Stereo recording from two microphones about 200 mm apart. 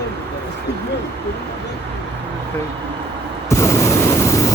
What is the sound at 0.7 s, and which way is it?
Speech, 55° left (ahead or behind).